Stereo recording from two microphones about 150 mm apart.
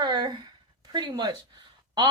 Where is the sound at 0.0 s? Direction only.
30° right (ahead or behind).